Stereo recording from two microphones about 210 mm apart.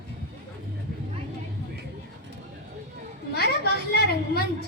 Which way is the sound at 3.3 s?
50° left (ahead or behind).